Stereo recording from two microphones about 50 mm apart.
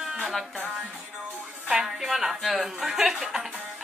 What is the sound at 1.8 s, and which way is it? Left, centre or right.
Speech, centre.